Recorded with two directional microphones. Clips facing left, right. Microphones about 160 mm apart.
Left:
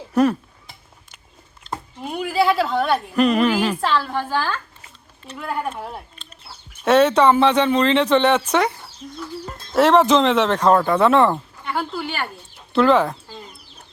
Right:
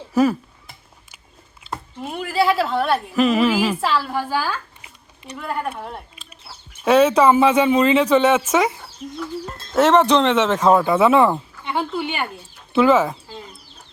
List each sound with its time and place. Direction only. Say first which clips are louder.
0.1 s a sound: even; 5° right (ahead or behind)
1.6 s speech: even; centre (ahead or behind)
5.4 s speech: even; centre (ahead or behind)
6.2 s chicken: even; 10° right (ahead or behind)
6.8 s speech: right 1 dB; centre (ahead or behind)
11.6 s speech: right 3 dB; 20° right (ahead or behind)
12.7 s speech: right 1 dB; 5° right (ahead or behind)